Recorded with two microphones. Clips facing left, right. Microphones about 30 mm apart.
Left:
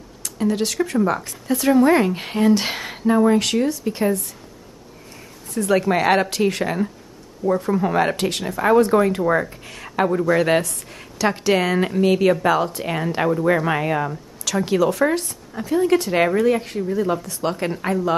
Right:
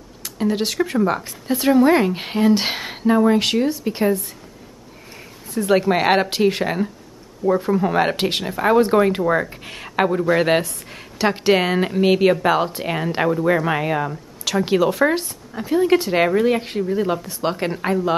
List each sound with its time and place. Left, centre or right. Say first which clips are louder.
0.2 s a woman's voice: even; centre
5.7 s a woman's voice: right 1 dB; right
7.7 s speech: right 1 dB; centre
8.0 s speech: right 1 dB; centre
10.2 s speech: even; right
12.9 s a woman's voice: even; centre
14.4 s a woman's voice: right 1 dB; right
16.4 s speech: even; right